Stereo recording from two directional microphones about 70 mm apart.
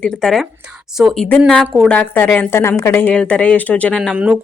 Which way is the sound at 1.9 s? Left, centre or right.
Left.